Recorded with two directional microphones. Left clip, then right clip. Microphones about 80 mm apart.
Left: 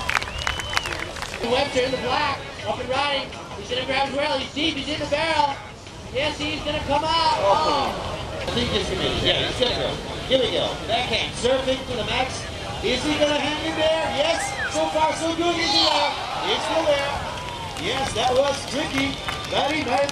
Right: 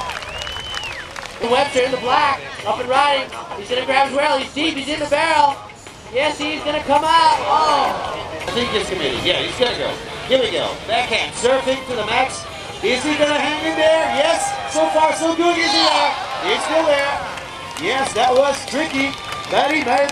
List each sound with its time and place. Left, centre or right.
1.5 s speech: right